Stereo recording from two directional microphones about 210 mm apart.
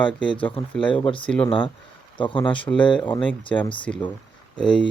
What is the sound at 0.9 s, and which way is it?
Speech, 25° left (ahead or behind).